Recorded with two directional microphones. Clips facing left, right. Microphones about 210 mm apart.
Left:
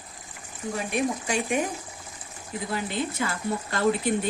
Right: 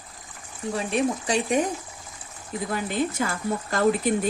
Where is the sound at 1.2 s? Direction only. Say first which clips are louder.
Right 3 dB; 35° right (ahead or behind).